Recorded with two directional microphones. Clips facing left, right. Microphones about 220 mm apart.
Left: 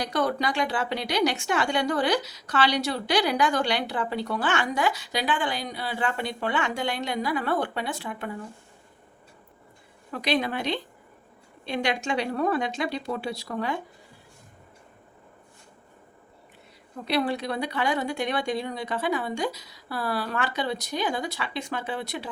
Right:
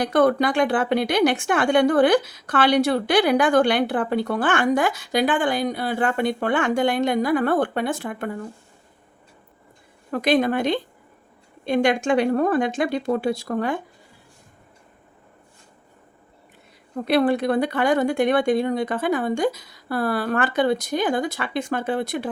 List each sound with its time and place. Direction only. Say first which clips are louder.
0.0 s a woman's voice: right 8 dB; 55° right (ahead or behind)
10.1 s a woman's voice: right 7 dB; 50° right (ahead or behind)
17.1 s a woman's voice: right 8 dB; 50° right (ahead or behind)